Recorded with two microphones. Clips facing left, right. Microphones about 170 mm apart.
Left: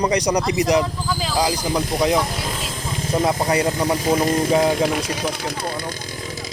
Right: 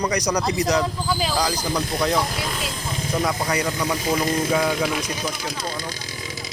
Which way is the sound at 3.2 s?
25° left (ahead or behind).